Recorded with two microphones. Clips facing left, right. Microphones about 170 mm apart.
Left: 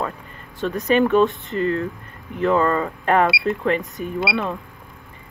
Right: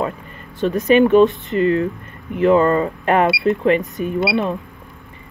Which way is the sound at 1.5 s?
70° right (ahead or behind).